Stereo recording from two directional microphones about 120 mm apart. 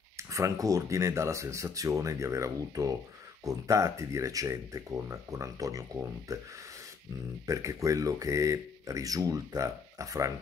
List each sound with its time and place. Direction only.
0.2 s speech: 25° right (ahead or behind)
7.4 s speech: 25° right (ahead or behind)